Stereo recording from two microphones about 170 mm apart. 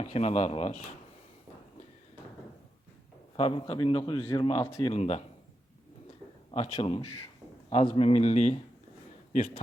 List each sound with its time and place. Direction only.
0.0 s a man's voice: 35° left (ahead or behind)
3.3 s a man's voice: 30° left (ahead or behind)
6.5 s a man's voice: 30° left (ahead or behind)